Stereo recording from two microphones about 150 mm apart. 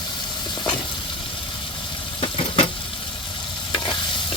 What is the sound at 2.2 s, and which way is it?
Vehicle, 40° left (ahead or behind).